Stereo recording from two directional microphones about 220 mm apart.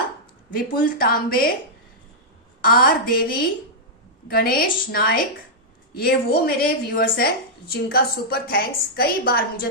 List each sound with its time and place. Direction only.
0.5 s a woman's voice: 40° left (ahead or behind)
2.6 s a woman's voice: 40° left (ahead or behind)